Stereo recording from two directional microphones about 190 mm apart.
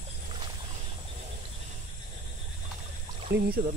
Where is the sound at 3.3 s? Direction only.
55° right (ahead or behind).